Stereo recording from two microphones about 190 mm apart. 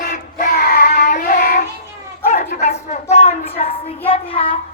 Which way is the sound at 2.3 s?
35° left (ahead or behind).